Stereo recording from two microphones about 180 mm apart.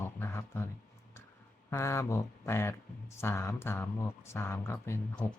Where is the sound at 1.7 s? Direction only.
15° left (ahead or behind).